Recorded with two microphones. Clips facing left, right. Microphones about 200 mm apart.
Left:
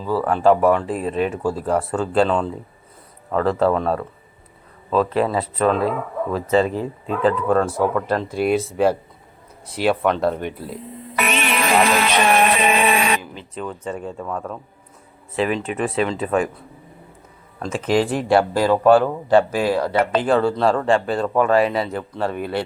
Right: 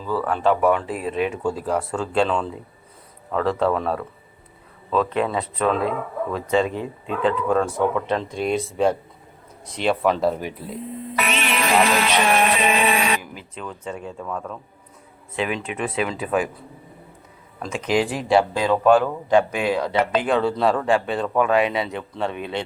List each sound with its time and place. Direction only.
0.0 s speech: 40° left (ahead or behind)
0.4 s speech: centre (ahead or behind)
11.2 s music: 55° left (ahead or behind)
13.6 s speech: centre (ahead or behind)
17.6 s speech: centre (ahead or behind)
20.2 s speech: centre (ahead or behind)